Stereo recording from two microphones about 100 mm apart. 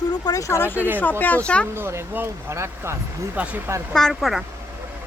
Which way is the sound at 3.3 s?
15° right (ahead or behind).